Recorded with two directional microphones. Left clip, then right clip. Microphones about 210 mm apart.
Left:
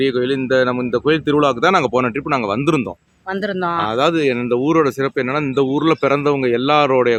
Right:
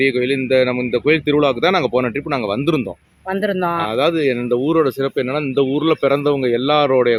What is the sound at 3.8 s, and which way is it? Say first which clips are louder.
Speech: left 2 dB; 15° left (ahead or behind).